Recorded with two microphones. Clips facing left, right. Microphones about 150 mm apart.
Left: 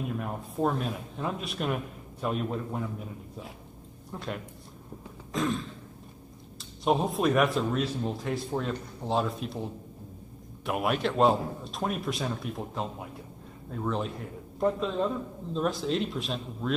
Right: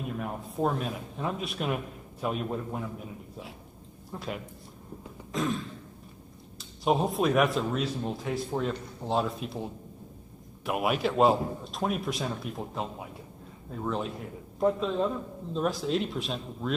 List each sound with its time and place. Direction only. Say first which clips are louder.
0.2 s speech: right 1 dB; centre (ahead or behind)
4.1 s speech: even; centre (ahead or behind)
5.3 s throat clearing: left 1 dB; centre (ahead or behind)
6.6 s speech: even; centre (ahead or behind)